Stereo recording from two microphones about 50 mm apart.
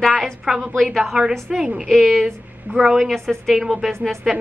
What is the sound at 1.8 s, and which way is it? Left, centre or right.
Speech, centre.